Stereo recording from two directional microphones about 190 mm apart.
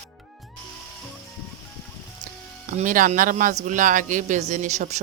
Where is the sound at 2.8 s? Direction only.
45° right (ahead or behind).